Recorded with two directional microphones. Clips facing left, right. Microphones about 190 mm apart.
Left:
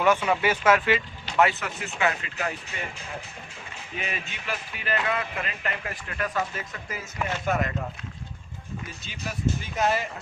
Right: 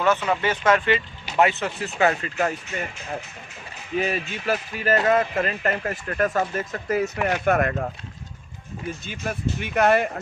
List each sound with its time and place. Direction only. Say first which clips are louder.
0.0 s speech: right 1 dB; 10° left (ahead or behind)
1.2 s speech: right 4 dB; 20° right (ahead or behind); by 2.9 s 50° right (ahead or behind)
3.9 s speech: right 10 dB; 40° right (ahead or behind); by 7.9 s 55° right (ahead or behind)
9.0 s speech: left 1 dB; 55° right (ahead or behind)